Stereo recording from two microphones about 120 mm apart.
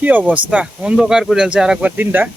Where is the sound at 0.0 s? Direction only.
15° right (ahead or behind).